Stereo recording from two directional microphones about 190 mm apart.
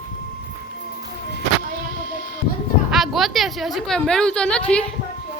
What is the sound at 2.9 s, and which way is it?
A woman's voice, centre (ahead or behind).